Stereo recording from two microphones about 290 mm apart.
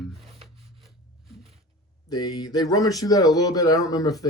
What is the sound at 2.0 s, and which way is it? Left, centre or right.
Speech, centre.